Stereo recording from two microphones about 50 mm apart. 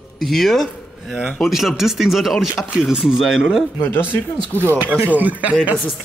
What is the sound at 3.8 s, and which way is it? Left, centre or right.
Speech, left.